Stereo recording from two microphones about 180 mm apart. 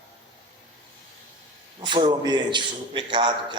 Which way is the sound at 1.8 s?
25° right (ahead or behind).